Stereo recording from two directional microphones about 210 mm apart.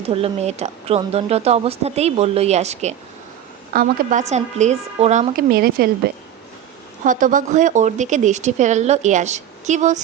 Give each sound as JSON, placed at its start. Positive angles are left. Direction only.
{"t": 0.0, "sound": "speech", "side_deg": -30}
{"t": 3.7, "sound": "speech", "side_deg": -45}
{"t": 5.5, "sound": "speech", "side_deg": -45}
{"t": 7.0, "sound": "speech", "side_deg": -40}